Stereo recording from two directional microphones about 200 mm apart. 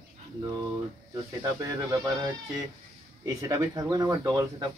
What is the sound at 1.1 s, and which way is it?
Speech, 15° right (ahead or behind).